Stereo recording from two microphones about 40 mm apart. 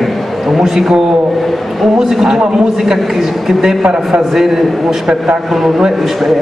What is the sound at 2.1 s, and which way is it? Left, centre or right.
A man's voice, centre.